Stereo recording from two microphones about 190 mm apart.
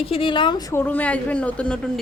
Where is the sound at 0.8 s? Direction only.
5° left (ahead or behind).